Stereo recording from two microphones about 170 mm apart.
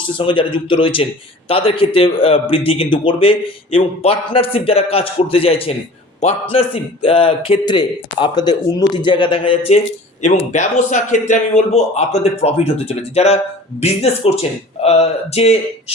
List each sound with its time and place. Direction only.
0.2 s a man's voice: 30° left (ahead or behind)